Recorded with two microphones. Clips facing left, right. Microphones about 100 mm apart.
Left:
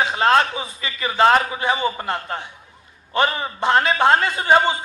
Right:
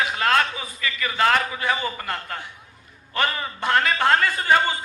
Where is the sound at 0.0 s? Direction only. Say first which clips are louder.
Left 4 dB; 25° left (ahead or behind).